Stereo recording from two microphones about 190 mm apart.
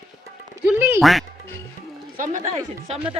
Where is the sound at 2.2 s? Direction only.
40° right (ahead or behind).